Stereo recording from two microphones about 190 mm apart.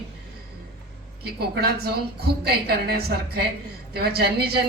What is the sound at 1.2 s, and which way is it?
A woman's voice, 55° right (ahead or behind).